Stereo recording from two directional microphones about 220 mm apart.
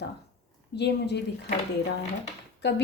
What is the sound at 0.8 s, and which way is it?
Speech, 50° left (ahead or behind).